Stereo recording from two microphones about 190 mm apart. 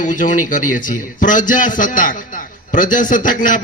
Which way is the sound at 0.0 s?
40° left (ahead or behind).